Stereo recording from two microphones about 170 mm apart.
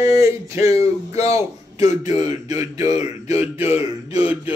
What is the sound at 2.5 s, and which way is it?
Speech, 20° right (ahead or behind).